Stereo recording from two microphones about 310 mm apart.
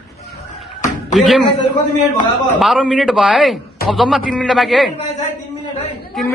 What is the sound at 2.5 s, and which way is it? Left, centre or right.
A man's voice, centre.